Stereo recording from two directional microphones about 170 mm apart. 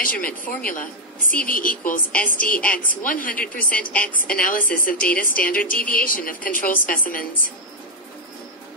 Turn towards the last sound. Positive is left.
turn(degrees=55)  # may be behind; listen again after turning